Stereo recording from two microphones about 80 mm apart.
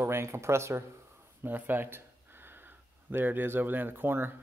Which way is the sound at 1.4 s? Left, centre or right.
Right.